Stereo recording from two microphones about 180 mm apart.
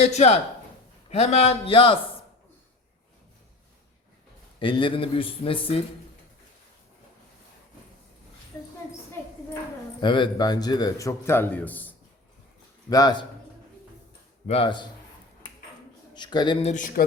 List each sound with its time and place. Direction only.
0.0 s a man's voice: 35° left (ahead or behind)
4.6 s a man's voice: 30° left (ahead or behind)
10.0 s a man's voice: 25° left (ahead or behind); by 11.9 s 10° left (ahead or behind)
12.9 s a man's voice: 20° left (ahead or behind)
14.4 s a man's voice: 35° left (ahead or behind)
16.1 s a man's voice: 25° left (ahead or behind)
16.6 s speech: 45° left (ahead or behind)